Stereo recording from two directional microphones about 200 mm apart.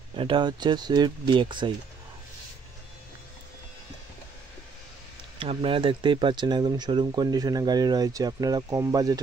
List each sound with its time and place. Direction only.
0.1 s speech: 25° right (ahead or behind)
5.4 s speech: 25° right (ahead or behind)